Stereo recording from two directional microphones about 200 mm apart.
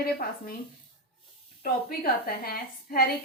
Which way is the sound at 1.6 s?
45° left (ahead or behind).